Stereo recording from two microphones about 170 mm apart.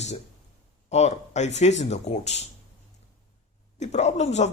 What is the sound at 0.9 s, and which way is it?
Speech, 40° left (ahead or behind).